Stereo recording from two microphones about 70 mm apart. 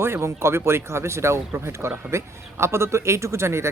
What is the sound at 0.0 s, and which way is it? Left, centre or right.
A man's voice, right.